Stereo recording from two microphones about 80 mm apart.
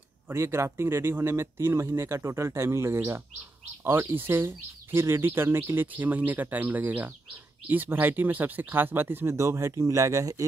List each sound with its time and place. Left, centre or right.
0.3 s speech: right